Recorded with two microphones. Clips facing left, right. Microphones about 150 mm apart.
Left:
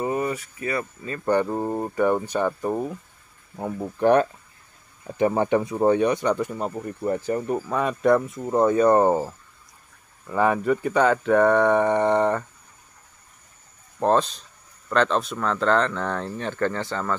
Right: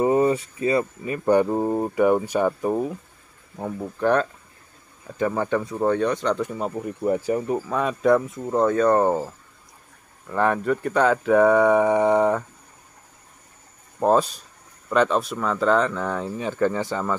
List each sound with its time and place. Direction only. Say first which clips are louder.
0.0 s speech: right 6 dB; 25° right (ahead or behind); by 3.9 s 5° left (ahead or behind)
4.0 s speech: left 3 dB; 15° left (ahead or behind)
6.5 s speech: right 1 dB; 5° right (ahead or behind)
13.9 s speech: right 1 dB; 5° right (ahead or behind)